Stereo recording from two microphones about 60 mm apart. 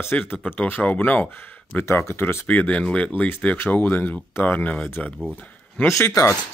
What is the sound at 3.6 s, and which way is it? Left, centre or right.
Speech, left.